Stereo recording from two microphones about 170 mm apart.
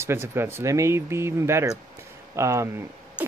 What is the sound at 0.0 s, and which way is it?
Speech, 15° right (ahead or behind).